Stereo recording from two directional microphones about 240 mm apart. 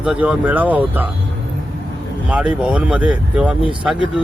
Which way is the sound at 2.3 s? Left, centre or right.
Centre.